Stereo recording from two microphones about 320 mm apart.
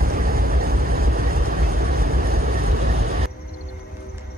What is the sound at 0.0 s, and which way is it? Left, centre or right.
Vehicle, right.